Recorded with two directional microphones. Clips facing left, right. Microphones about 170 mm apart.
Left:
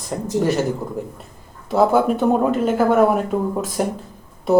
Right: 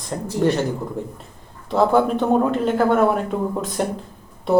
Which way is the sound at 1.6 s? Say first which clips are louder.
Left 1 dB; 5° left (ahead or behind).